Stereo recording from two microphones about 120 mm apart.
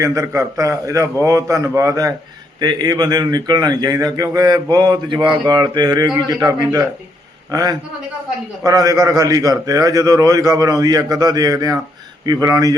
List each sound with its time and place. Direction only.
0.0 s a man's voice: 25° right (ahead or behind)